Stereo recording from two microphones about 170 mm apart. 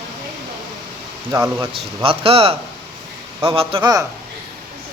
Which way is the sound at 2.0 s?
35° right (ahead or behind).